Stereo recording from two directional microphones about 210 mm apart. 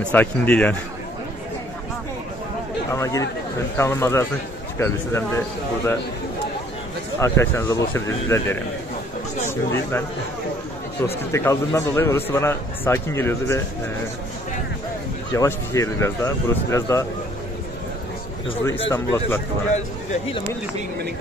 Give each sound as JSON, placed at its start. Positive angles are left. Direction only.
{"t": 0.0, "sound": "a man's voice", "side_deg": 5}
{"t": 2.9, "sound": "a man's voice", "side_deg": 15}
{"t": 7.2, "sound": "a man's voice", "side_deg": 10}
{"t": 15.3, "sound": "a man's voice", "side_deg": 15}
{"t": 18.9, "sound": "a man's voice", "side_deg": 10}
{"t": 19.7, "sound": "speech", "side_deg": 35}